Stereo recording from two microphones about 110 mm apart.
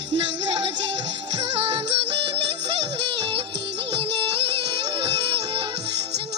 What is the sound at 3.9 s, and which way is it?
Music, 55° right (ahead or behind).